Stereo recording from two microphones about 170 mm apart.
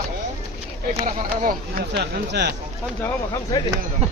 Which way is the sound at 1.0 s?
55° right (ahead or behind).